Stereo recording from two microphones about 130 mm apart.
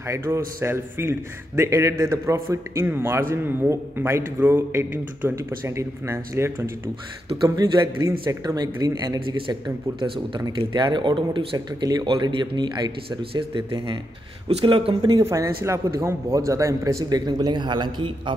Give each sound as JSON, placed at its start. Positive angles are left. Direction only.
{"t": 0.0, "sound": "a man's voice", "side_deg": -20}
{"t": 10.6, "sound": "speech", "side_deg": -35}
{"t": 15.2, "sound": "a man's voice", "side_deg": -25}